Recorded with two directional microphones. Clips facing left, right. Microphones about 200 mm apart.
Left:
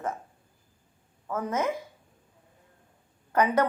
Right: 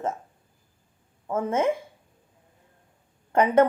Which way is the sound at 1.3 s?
25° right (ahead or behind).